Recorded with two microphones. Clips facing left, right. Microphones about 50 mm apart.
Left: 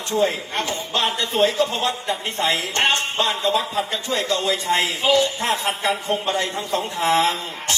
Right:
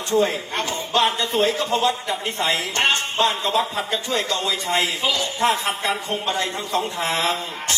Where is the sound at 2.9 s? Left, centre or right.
Left.